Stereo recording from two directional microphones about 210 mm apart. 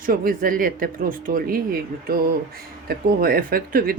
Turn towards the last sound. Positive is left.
turn(degrees=-45)  # may be behind; listen again after turning